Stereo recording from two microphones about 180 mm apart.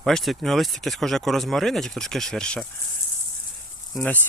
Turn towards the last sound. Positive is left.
turn(degrees=5)  # may be behind; listen again after turning